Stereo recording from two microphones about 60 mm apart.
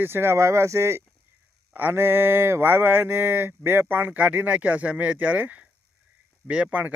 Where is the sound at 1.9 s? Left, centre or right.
Right.